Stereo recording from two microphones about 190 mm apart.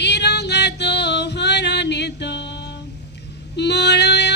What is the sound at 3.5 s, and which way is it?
Female singing, 65° left (ahead or behind).